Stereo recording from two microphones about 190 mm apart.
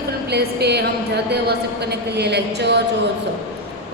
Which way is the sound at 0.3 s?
60° right (ahead or behind).